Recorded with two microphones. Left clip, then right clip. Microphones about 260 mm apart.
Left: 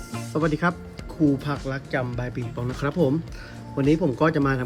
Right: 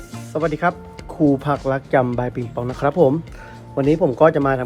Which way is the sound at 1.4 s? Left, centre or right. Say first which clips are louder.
Right 9 dB; centre.